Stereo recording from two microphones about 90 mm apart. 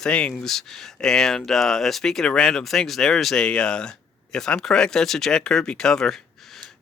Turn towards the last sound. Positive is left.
turn(degrees=5)  # may be behind; listen again after turning